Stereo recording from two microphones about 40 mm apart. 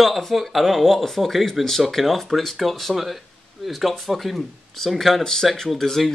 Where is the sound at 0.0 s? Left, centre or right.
Centre.